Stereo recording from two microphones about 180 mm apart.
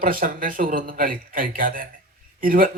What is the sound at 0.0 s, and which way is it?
Speech, 50° right (ahead or behind).